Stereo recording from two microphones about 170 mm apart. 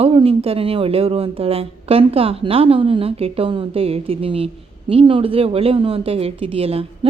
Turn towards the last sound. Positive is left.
turn(degrees=-35)  # may be behind; listen again after turning